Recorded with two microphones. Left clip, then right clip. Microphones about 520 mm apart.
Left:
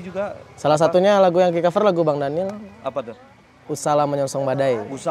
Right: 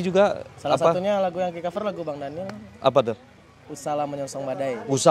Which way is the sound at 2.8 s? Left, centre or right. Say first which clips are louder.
Right 7 dB; right.